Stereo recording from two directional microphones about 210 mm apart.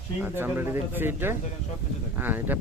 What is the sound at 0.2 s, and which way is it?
Speech, 10° right (ahead or behind).